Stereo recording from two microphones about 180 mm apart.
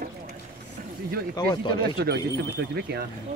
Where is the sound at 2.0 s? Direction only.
65° right (ahead or behind).